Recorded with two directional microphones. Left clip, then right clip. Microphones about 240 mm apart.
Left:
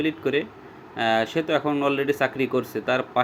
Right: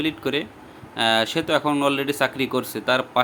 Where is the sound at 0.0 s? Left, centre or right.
Centre.